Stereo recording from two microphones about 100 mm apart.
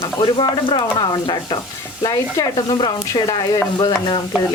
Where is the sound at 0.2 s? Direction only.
55° left (ahead or behind); by 2.5 s 40° left (ahead or behind).